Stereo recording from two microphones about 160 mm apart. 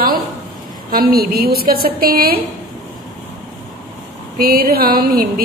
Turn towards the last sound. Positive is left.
turn(degrees=-70)  # may be behind; listen again after turning